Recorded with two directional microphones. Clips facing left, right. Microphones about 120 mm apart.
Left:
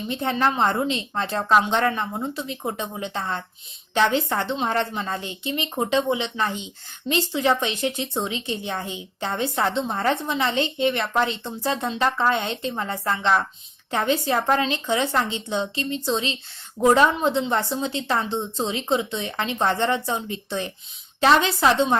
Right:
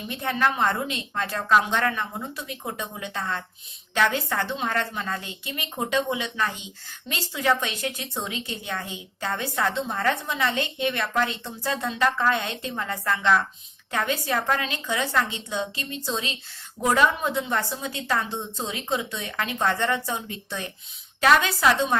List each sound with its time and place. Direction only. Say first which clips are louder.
0.1 s a woman's voice: left 2 dB; 30° left (ahead or behind)